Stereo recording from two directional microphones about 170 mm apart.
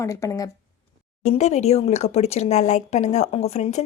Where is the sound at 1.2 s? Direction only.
40° left (ahead or behind).